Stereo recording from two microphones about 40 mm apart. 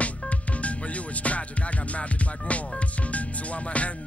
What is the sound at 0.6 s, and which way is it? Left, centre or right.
Music, left.